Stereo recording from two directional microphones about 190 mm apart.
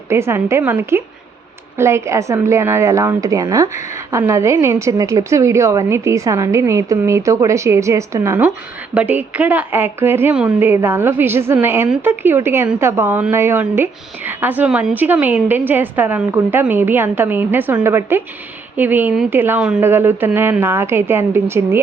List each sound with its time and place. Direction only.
0.1 s a woman's voice: 15° right (ahead or behind)